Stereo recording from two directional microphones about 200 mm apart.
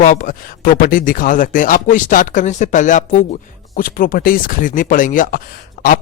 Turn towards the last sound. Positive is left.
turn(degrees=45)  # may be behind; listen again after turning